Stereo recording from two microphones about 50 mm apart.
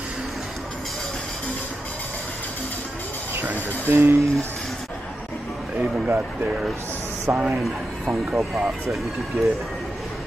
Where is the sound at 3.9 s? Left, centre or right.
Right.